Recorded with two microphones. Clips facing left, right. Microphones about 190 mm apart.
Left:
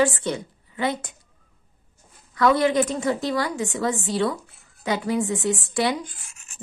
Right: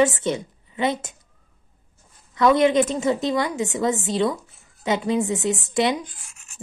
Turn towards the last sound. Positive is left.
turn(degrees=-20)  # may be behind; listen again after turning